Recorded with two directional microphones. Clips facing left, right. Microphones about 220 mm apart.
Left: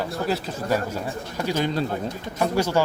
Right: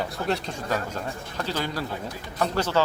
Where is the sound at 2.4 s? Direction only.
10° left (ahead or behind).